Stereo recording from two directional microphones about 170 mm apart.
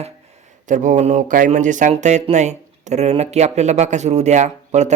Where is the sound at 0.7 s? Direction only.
45° right (ahead or behind).